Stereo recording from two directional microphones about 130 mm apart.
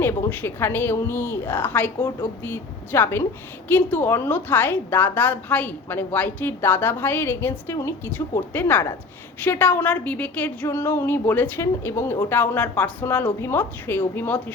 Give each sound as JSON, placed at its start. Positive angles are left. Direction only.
{"t": 0.0, "sound": "a woman's voice", "side_deg": 15}